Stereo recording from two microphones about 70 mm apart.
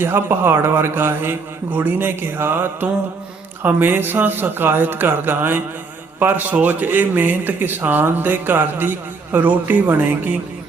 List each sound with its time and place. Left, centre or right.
0.0 s a man's voice: right